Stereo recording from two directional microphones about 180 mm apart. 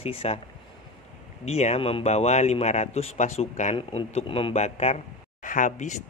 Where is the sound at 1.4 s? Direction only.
35° left (ahead or behind).